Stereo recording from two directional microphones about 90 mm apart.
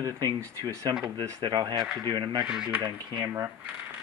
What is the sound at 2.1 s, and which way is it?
Speech, 55° right (ahead or behind).